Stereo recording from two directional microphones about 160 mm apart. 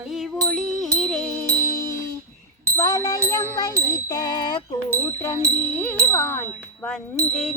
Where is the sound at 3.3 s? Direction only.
20° left (ahead or behind).